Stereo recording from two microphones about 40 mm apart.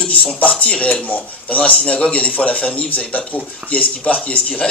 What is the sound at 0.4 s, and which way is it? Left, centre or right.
Speech, left.